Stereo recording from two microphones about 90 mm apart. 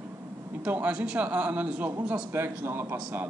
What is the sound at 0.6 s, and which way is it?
A man's voice, 15° right (ahead or behind).